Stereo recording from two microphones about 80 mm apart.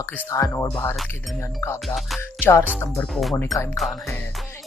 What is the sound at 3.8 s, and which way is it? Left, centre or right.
Speech, centre.